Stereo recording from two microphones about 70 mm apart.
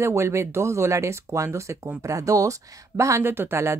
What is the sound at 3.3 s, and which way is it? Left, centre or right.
Speech, right.